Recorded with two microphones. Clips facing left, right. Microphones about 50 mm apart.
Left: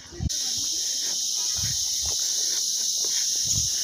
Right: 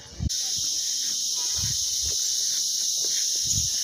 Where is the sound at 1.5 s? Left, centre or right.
Centre.